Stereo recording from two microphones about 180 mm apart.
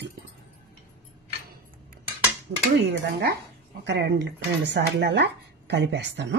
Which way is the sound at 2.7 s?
70° right (ahead or behind).